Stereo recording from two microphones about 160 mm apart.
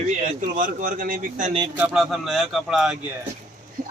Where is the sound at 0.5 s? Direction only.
60° right (ahead or behind).